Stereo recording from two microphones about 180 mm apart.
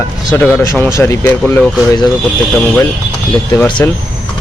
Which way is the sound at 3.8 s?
15° left (ahead or behind).